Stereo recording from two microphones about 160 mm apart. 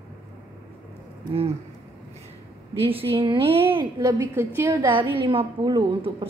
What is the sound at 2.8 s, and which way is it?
A woman's voice, 35° right (ahead or behind).